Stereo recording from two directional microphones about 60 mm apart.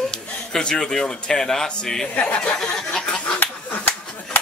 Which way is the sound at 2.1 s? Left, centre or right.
Centre.